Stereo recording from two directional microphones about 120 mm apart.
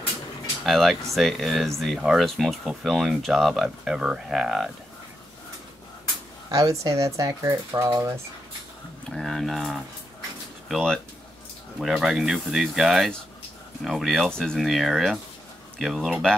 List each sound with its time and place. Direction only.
0.7 s speech: centre (ahead or behind)
6.5 s speech: 30° right (ahead or behind)
9.1 s speech: 5° left (ahead or behind)